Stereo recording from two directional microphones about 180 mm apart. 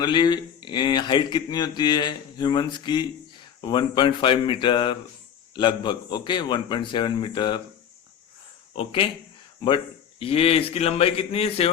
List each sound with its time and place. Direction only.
0.0 s a man's voice: 25° left (ahead or behind)
8.7 s a man's voice: 30° left (ahead or behind)